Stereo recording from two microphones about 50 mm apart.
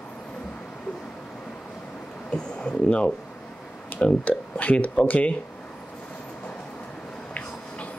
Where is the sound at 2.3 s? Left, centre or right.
Left.